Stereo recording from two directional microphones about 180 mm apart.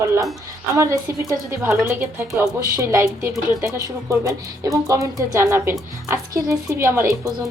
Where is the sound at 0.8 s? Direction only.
15° right (ahead or behind).